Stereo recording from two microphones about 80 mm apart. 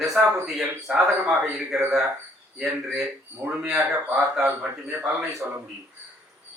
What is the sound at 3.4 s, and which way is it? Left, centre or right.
A man's voice, right.